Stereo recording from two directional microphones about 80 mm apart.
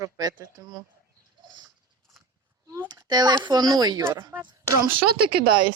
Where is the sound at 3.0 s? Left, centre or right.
Right.